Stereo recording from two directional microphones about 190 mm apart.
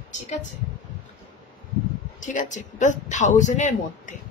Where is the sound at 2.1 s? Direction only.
40° left (ahead or behind).